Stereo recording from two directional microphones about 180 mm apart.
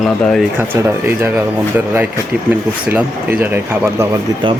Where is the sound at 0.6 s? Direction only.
15° right (ahead or behind).